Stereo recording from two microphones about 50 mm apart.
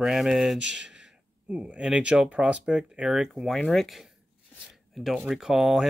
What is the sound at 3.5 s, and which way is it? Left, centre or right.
Speech, centre.